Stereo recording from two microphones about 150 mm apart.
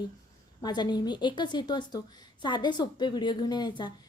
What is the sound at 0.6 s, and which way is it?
Speech, 30° left (ahead or behind).